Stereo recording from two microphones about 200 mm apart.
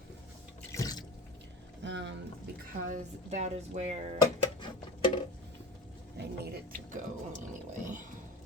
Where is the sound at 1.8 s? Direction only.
60° right (ahead or behind).